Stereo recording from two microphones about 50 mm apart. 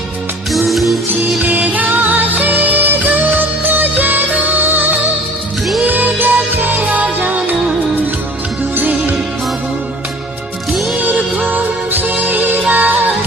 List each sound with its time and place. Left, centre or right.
0.5 s music: centre
1.4 s music: right
8.7 s music: right
10.7 s music: centre
10.9 s music: right